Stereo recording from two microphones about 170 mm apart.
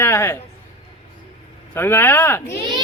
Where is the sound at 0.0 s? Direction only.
15° left (ahead or behind).